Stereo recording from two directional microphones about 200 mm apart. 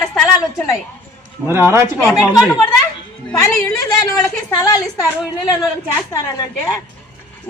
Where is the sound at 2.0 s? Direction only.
5° left (ahead or behind).